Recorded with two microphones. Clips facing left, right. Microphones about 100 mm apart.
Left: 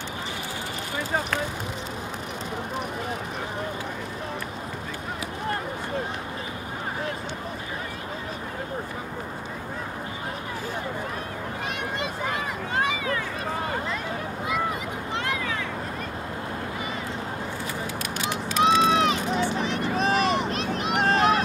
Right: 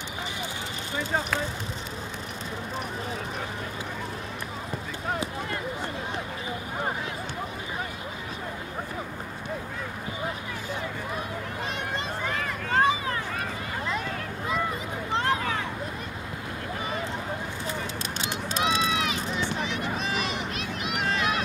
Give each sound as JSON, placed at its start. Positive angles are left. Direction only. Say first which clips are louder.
{"t": 12.7, "sound": "vehicle", "louder": "right 3 dB", "side_deg": -35}
{"t": 15.1, "sound": "a sound", "louder": "right 4 dB", "side_deg": -35}
{"t": 18.2, "sound": "run", "louder": "left 2 dB", "side_deg": -30}
{"t": 18.6, "sound": "run", "louder": "left 7 dB", "side_deg": 40}